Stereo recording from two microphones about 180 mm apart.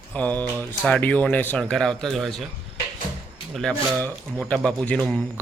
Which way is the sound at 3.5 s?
5° left (ahead or behind).